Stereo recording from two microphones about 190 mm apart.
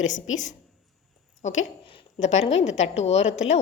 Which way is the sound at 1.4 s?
40° left (ahead or behind).